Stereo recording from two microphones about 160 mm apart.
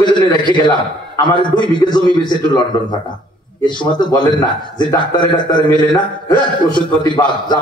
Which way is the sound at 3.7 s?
25° left (ahead or behind).